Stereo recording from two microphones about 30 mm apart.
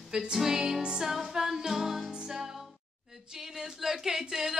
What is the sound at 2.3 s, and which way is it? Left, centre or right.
Music, centre.